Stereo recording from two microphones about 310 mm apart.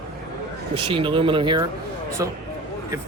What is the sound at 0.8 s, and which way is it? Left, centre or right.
Speech, centre.